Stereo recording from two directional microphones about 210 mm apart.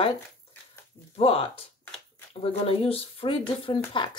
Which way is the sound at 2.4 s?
25° left (ahead or behind).